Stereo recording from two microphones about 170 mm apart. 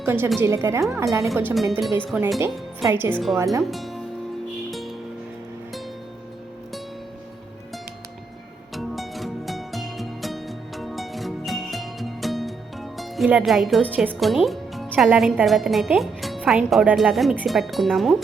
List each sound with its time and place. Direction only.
0.0 s speech: 15° right (ahead or behind)
2.0 s speech: 5° right (ahead or behind); by 3.6 s 20° right (ahead or behind)
3.6 s speech: centre (ahead or behind)
4.7 s music: centre (ahead or behind)
8.7 s music: centre (ahead or behind)